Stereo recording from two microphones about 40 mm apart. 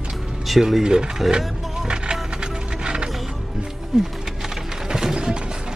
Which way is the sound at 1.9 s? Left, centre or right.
Right.